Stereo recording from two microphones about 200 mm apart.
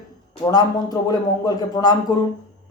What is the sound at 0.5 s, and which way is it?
Speech, 20° left (ahead or behind).